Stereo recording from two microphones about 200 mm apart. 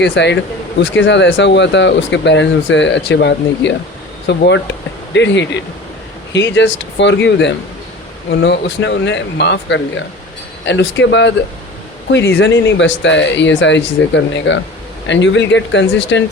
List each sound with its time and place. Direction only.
0.0 s speech: 60° left (ahead or behind)
12.4 s speech: 65° left (ahead or behind)